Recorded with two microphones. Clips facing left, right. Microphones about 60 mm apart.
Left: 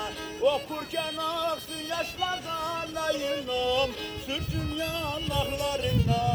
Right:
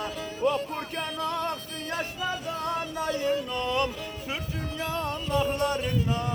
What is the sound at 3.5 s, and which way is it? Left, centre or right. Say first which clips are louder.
Music: left 1 dB; right.